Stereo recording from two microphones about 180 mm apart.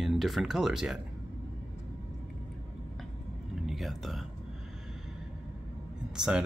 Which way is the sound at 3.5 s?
Centre (ahead or behind).